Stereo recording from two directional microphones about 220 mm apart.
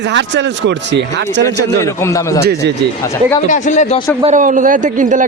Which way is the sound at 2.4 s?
50° right (ahead or behind).